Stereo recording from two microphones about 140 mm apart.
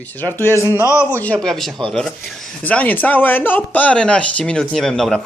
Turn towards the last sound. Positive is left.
turn(degrees=5)  # may be behind; listen again after turning